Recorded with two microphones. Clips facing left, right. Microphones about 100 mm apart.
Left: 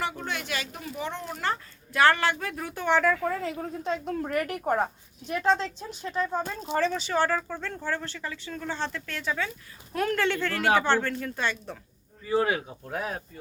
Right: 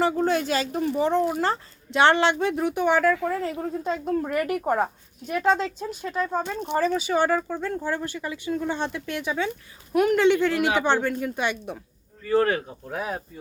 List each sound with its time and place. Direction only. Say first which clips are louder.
0.0 s a woman's voice: right 10 dB; 35° right (ahead or behind); by 11.8 s 15° right (ahead or behind)
12.2 s a woman's voice: right 4 dB; 10° left (ahead or behind); by 13.2 s 5° right (ahead or behind)